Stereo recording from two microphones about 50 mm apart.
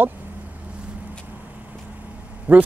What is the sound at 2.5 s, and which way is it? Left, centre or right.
Speech, right.